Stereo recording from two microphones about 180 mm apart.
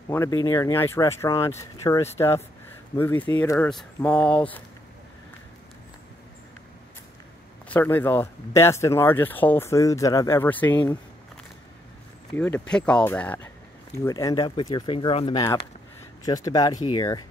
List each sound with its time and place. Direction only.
0.1 s speech: 15° left (ahead or behind)
7.7 s speech: 10° left (ahead or behind)
12.4 s speech: 10° left (ahead or behind)